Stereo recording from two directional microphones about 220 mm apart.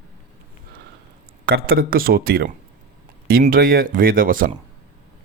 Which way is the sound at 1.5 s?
45° right (ahead or behind).